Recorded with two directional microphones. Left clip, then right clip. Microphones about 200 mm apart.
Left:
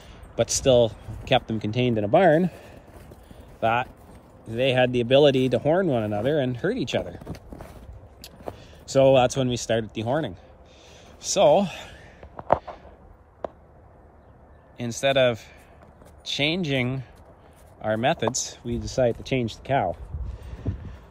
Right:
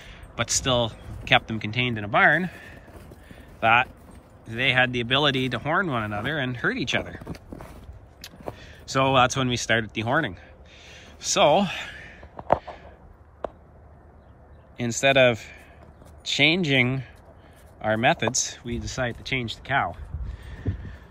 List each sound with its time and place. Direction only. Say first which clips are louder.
0.0 s speech: left 4 dB; 20° left (ahead or behind)
3.0 s clip-clop: right 1 dB; 15° left (ahead or behind)
4.5 s speech: even; 20° left (ahead or behind)
10.9 s a sound: right 2 dB; 10° left (ahead or behind)
14.8 s speech: right 2 dB; 5° left (ahead or behind); by 20.9 s 25° left (ahead or behind)